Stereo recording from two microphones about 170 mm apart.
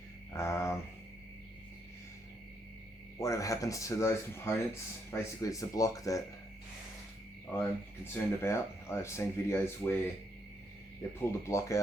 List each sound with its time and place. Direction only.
0.3 s speech: 15° left (ahead or behind)
3.2 s speech: 20° left (ahead or behind)
8.1 s speech: 15° left (ahead or behind)
11.2 s speech: 15° left (ahead or behind)